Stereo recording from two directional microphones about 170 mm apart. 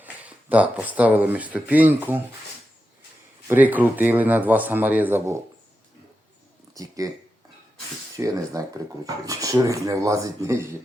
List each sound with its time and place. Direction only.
0.0 s speech: 10° right (ahead or behind)
3.4 s a man's voice: 10° right (ahead or behind)
6.7 s speech: 20° right (ahead or behind)
8.1 s speech: 20° right (ahead or behind)